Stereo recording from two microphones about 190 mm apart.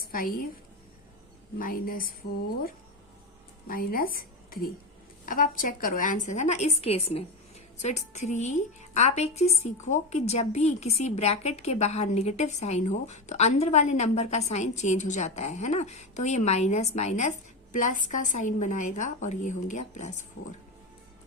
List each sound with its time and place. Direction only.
0.0 s a woman's voice: 50° left (ahead or behind)
1.5 s a woman's voice: 50° left (ahead or behind)
3.7 s a woman's voice: 50° left (ahead or behind)